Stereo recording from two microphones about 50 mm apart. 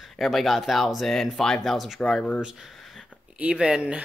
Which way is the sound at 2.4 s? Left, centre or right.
Centre.